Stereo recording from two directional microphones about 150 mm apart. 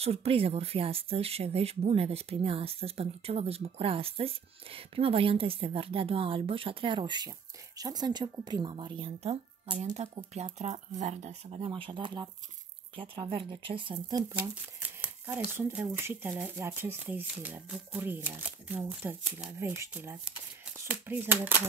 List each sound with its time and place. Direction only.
0.0 s speech: 40° right (ahead or behind)
11.6 s speech: 35° right (ahead or behind)
14.4 s speech: 10° right (ahead or behind)